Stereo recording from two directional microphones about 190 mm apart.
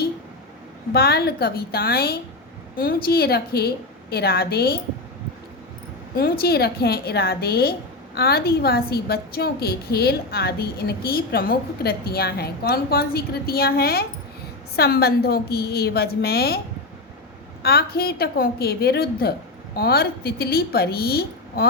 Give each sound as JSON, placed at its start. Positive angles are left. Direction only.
{"t": 0.9, "sound": "a woman's voice", "side_deg": 55}
{"t": 6.1, "sound": "a woman's voice", "side_deg": 55}
{"t": 17.6, "sound": "a woman's voice", "side_deg": 55}